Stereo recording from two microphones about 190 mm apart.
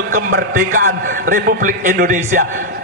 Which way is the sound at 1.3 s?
45° right (ahead or behind).